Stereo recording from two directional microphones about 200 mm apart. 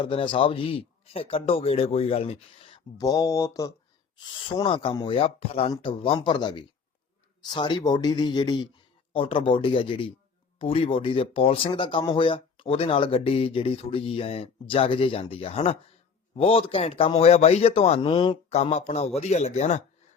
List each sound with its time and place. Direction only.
0.0 s speech: 25° left (ahead or behind)